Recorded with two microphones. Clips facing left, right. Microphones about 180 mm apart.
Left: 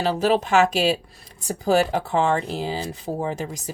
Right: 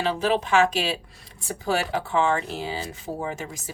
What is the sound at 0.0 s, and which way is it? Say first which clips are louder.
Speech: left 3 dB; 40° left (ahead or behind).